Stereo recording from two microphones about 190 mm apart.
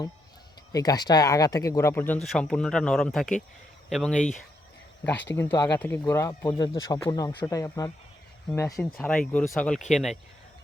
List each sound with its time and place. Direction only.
0.7 s speech: 20° left (ahead or behind); by 10.2 s centre (ahead or behind)